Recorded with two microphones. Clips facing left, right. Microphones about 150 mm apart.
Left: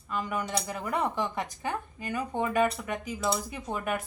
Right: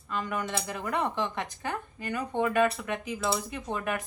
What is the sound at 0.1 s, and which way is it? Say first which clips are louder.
Speech: even; 10° left (ahead or behind).